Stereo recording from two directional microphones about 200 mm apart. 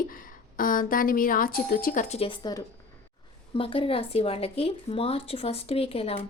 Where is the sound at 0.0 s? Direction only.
45° left (ahead or behind).